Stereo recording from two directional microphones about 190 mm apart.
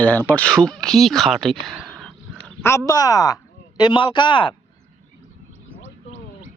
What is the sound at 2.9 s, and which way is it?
Speech, 20° left (ahead or behind).